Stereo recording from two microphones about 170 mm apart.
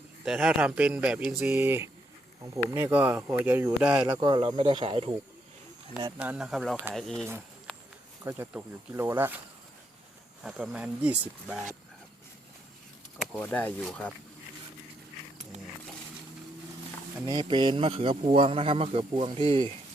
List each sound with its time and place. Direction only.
0.3 s speech: 5° right (ahead or behind)
4.0 s speech: 25° right (ahead or behind)
6.1 s speech: 5° right (ahead or behind)
8.2 s speech: 15° right (ahead or behind)
10.4 s speech: 5° right (ahead or behind)
13.1 s speech: 5° left (ahead or behind)
17.2 s a man's voice: 30° right (ahead or behind)